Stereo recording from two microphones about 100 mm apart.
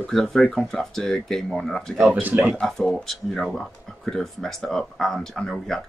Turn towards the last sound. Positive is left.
turn(degrees=5)  # may be behind; listen again after turning